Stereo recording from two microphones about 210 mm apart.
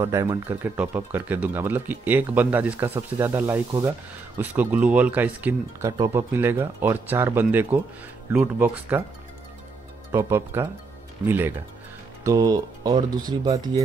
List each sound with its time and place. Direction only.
0.0 s speech: 15° right (ahead or behind)
10.1 s speech: 10° right (ahead or behind)